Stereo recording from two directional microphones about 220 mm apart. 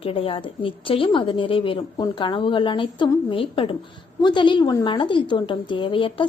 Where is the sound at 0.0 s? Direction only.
25° left (ahead or behind).